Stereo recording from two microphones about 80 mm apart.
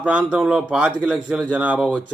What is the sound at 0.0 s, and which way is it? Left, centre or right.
A man's voice, centre.